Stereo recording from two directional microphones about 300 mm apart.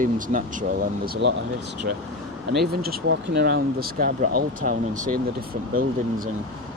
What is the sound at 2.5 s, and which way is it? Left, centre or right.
Speech, right.